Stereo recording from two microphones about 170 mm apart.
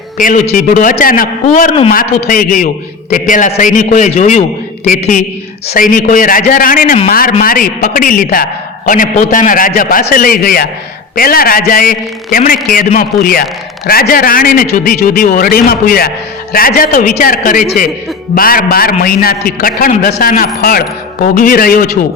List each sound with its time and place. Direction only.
0.2 s a man's voice: 55° left (ahead or behind)
5.6 s a man's voice: 55° left (ahead or behind)